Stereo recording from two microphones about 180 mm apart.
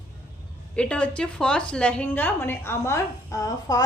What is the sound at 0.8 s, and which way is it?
A woman's voice, 5° left (ahead or behind).